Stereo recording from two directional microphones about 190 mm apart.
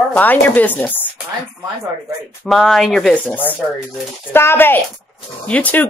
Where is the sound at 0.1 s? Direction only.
10° left (ahead or behind).